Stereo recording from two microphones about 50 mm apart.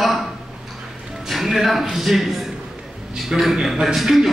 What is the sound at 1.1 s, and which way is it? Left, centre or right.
Music, centre.